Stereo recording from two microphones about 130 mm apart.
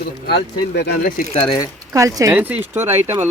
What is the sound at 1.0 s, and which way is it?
Speech, 90° left.